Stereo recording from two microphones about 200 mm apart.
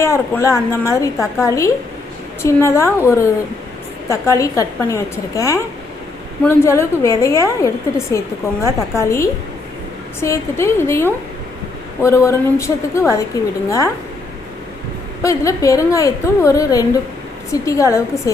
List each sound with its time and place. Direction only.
0.0 s a woman's voice: 15° left (ahead or behind)
15.2 s a woman's voice: 15° left (ahead or behind)